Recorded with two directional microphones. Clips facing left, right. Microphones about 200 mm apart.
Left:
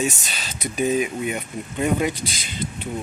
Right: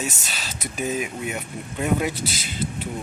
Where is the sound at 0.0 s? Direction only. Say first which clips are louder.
Left 5 dB; centre (ahead or behind).